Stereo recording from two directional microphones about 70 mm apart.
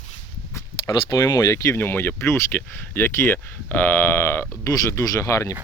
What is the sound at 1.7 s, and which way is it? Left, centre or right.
Speech, left.